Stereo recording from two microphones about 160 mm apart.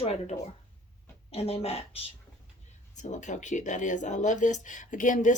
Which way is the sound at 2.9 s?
50° left (ahead or behind).